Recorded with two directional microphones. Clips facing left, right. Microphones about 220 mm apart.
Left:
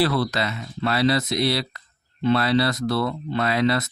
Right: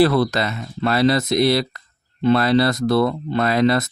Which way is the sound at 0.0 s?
45° right (ahead or behind).